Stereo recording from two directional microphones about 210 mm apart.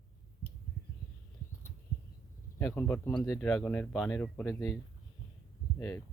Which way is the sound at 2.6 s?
10° left (ahead or behind).